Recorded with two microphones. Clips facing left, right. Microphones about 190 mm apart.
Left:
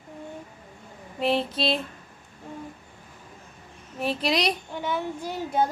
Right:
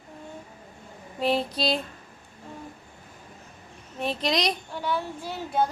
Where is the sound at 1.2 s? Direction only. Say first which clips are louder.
Left 1 dB; centre (ahead or behind).